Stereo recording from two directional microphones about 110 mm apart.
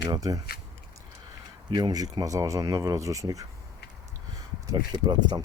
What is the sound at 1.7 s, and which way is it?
Speech, 35° right (ahead or behind).